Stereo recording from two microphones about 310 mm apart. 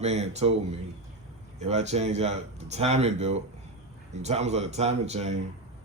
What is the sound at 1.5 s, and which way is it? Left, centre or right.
A man's voice, right.